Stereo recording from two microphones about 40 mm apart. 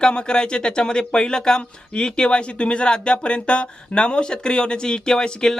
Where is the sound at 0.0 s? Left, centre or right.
Left.